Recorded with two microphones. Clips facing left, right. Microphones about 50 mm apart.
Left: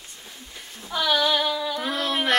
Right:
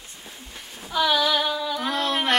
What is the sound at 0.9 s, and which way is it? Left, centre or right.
Speech, centre.